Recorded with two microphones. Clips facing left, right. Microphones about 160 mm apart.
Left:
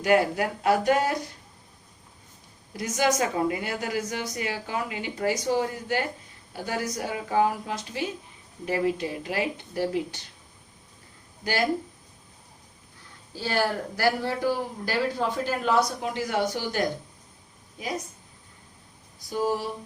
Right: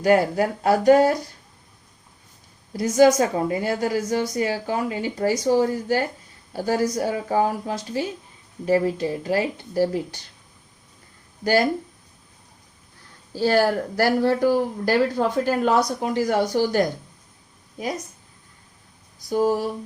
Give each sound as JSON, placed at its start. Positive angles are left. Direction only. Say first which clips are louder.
{"t": 0.0, "sound": "a woman's voice", "louder": "right 4 dB", "side_deg": -35}
{"t": 2.7, "sound": "a woman's voice", "louder": "right 9 dB", "side_deg": -35}
{"t": 13.4, "sound": "speech", "louder": "right 7 dB", "side_deg": -40}
{"t": 19.3, "sound": "speech", "louder": "right 6 dB", "side_deg": -45}